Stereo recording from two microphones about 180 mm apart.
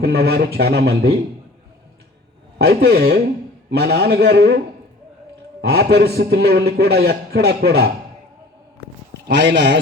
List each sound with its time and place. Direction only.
0.0 s a man's voice: 60° right (ahead or behind)
2.6 s a man's voice: 65° right (ahead or behind)
5.6 s a man's voice: 65° right (ahead or behind)
9.2 s speech: 70° right (ahead or behind)